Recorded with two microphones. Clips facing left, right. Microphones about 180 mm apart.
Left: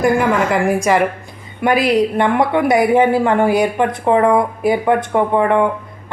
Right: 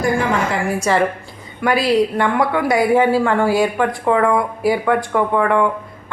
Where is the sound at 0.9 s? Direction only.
15° left (ahead or behind).